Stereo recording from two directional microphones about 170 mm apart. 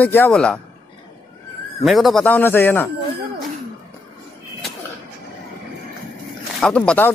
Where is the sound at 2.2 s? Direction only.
10° left (ahead or behind).